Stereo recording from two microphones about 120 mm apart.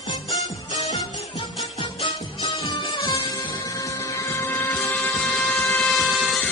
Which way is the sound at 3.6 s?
30° left (ahead or behind).